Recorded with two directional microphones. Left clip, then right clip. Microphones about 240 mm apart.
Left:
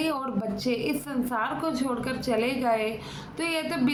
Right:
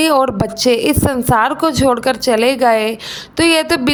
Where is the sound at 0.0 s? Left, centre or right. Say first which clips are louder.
Right 16 dB; right.